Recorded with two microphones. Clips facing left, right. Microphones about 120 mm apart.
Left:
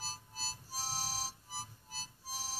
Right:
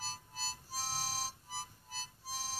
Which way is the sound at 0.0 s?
40° left (ahead or behind).